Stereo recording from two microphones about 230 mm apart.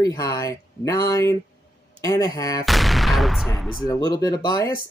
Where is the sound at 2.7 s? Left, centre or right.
Centre.